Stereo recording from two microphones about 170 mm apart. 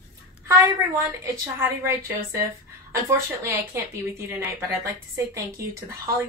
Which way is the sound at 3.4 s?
15° right (ahead or behind).